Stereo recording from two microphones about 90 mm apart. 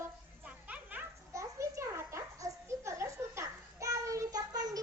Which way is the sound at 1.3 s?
35° right (ahead or behind).